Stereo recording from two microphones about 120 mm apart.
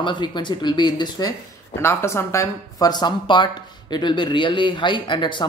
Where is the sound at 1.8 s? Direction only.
20° left (ahead or behind); by 5.4 s 40° left (ahead or behind).